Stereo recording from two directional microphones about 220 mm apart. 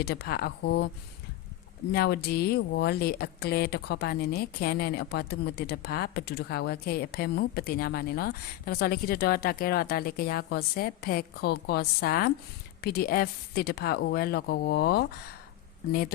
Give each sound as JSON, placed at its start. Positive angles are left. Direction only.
{"t": 0.0, "sound": "speech", "side_deg": 45}
{"t": 1.9, "sound": "speech", "side_deg": 45}